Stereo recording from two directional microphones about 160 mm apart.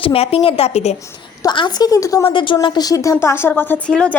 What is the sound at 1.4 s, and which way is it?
A woman's voice, 30° left (ahead or behind).